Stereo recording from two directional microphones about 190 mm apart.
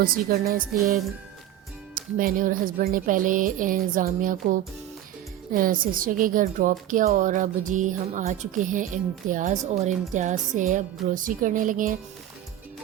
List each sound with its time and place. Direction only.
0.0 s a woman's voice: 50° right (ahead or behind)
2.0 s a woman's voice: 45° right (ahead or behind)